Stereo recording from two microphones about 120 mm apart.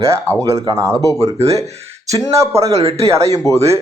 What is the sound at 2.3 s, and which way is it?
Speech, 25° right (ahead or behind).